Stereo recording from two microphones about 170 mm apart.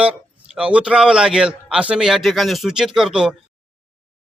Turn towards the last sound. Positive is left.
turn(degrees=-5)  # may be behind; listen again after turning